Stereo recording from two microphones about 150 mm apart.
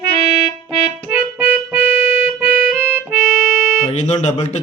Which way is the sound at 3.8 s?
50° left (ahead or behind).